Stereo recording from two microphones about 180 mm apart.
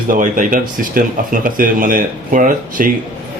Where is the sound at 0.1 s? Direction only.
50° right (ahead or behind).